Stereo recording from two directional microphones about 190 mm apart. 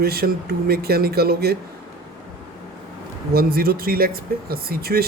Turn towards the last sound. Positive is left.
turn(degrees=-55)  # may be behind; listen again after turning